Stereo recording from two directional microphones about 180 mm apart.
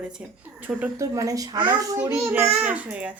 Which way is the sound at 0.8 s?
15° right (ahead or behind).